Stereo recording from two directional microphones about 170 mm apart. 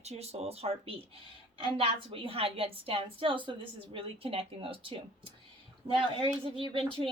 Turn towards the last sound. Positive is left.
turn(degrees=-30)  # may be behind; listen again after turning